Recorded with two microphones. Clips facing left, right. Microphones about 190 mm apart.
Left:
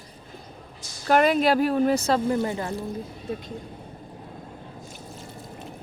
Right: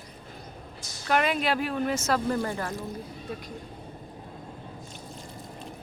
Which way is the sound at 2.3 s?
20° left (ahead or behind).